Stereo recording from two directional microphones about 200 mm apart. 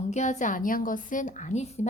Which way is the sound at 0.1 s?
35° left (ahead or behind).